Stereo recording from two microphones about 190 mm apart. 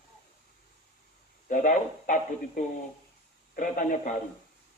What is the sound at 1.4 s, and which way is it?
Speech, 40° left (ahead or behind).